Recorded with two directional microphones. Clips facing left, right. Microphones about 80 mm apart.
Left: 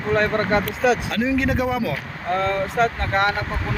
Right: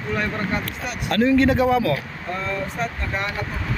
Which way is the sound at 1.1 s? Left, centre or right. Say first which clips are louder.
Right 4 dB; centre.